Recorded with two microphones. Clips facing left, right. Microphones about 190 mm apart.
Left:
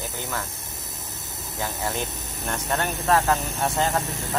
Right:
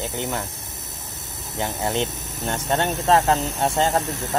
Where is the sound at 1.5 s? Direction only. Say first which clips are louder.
Right 5 dB; 25° right (ahead or behind).